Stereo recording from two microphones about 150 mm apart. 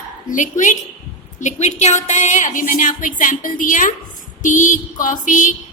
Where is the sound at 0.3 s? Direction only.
55° left (ahead or behind).